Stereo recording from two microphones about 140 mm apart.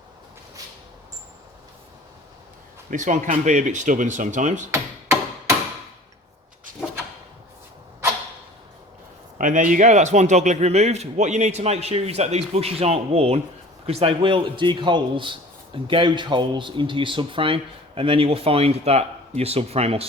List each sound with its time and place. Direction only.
2.9 s speech: 65° right (ahead or behind)
9.4 s a man's voice: 70° right (ahead or behind); by 20.1 s 45° right (ahead or behind)